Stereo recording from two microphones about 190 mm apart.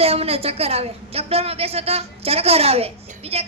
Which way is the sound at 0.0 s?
30° right (ahead or behind).